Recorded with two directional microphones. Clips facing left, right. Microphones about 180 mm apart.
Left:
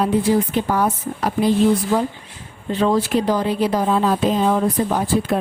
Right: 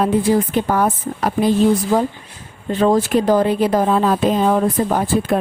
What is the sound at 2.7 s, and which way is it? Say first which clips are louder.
Speech: right 3 dB; 45° right (ahead or behind).